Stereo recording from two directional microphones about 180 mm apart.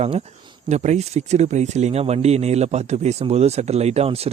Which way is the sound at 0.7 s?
40° right (ahead or behind).